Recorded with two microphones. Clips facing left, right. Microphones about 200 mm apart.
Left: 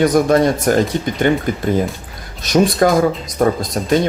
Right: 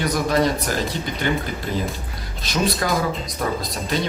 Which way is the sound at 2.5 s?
45° left (ahead or behind).